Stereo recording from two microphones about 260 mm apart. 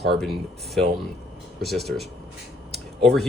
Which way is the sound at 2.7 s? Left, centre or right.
Centre.